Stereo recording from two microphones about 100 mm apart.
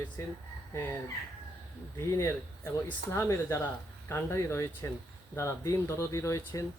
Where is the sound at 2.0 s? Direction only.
30° left (ahead or behind).